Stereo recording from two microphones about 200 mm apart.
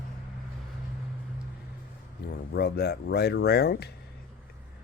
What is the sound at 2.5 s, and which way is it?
Speech, 55° left (ahead or behind).